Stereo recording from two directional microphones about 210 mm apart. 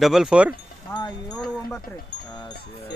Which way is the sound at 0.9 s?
10° left (ahead or behind).